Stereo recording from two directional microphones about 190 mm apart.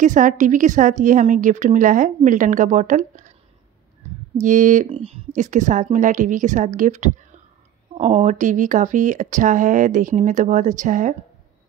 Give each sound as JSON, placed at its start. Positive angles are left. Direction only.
{"t": 0.0, "sound": "a woman's voice", "side_deg": -40}
{"t": 4.4, "sound": "speech", "side_deg": -40}